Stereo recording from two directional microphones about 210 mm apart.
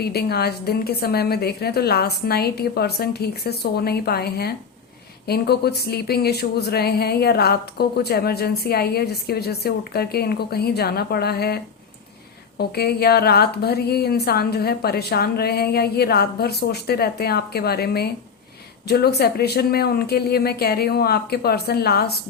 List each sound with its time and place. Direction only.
0.0 s speech: 50° left (ahead or behind)